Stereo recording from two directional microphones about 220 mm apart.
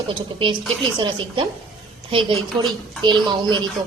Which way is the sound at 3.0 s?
20° right (ahead or behind).